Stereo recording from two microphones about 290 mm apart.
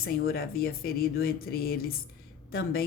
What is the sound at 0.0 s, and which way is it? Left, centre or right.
A woman's voice, left.